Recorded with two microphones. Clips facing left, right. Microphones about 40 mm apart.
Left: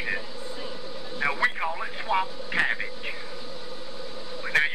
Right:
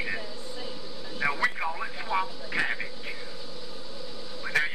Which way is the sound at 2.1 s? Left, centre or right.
Left.